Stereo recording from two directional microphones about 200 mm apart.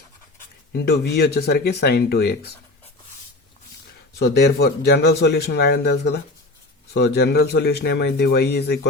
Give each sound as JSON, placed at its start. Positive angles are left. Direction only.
{"t": 0.7, "sound": "speech", "side_deg": 55}
{"t": 4.2, "sound": "a man's voice", "side_deg": 55}